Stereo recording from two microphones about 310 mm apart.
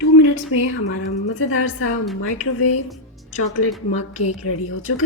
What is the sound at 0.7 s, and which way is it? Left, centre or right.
A woman's voice, left.